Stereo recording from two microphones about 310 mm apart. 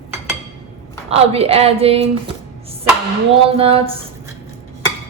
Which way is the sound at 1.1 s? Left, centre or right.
Centre.